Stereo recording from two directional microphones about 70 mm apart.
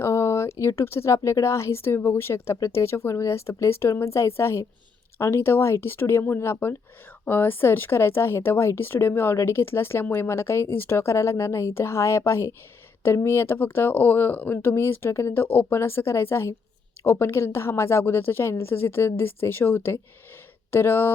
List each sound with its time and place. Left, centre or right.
0.0 s speech: left